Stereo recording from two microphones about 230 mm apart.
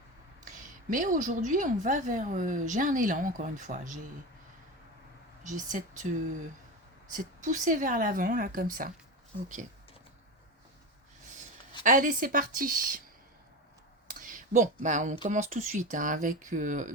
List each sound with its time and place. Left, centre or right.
0.4 s a woman's voice: right
5.4 s speech: right
7.1 s a woman's voice: right
11.8 s a woman's voice: right
14.1 s a woman's voice: right